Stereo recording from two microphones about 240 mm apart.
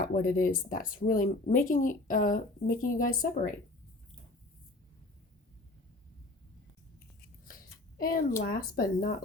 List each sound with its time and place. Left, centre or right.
0.0 s speech: left
7.9 s speech: left